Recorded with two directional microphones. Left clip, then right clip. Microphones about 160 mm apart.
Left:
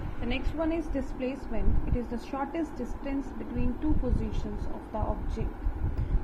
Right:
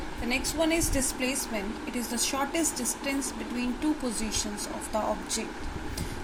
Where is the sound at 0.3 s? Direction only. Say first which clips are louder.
Right 4 dB; 15° right (ahead or behind).